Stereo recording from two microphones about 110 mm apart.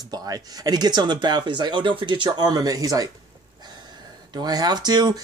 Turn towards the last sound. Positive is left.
turn(degrees=-40)  # may be behind; listen again after turning